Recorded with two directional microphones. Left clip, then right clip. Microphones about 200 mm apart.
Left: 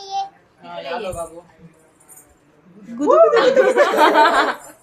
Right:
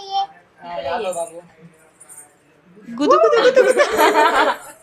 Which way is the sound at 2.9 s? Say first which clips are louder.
Left 1 dB; centre (ahead or behind).